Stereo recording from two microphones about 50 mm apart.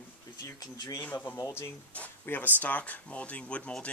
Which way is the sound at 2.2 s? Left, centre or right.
Left.